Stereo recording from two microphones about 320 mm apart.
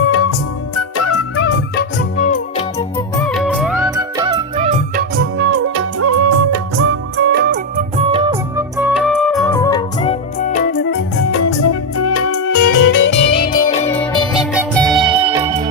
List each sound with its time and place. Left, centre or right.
0.8 s music: left
1.5 s music: left
2.7 s music: centre
4.5 s music: right
6.0 s music of bollywood: right
7.2 s music: right; by 8.6 s centre
8.8 s music: centre; by 11.0 s left
11.2 s music: left
13.8 s music: centre
14.9 s music: centre